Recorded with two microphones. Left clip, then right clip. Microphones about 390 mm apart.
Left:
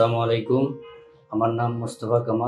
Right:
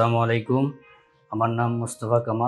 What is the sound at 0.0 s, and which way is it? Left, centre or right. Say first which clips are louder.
Speech: left 1 dB; right.